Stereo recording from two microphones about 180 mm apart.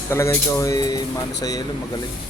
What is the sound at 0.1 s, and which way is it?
Speech, 15° left (ahead or behind).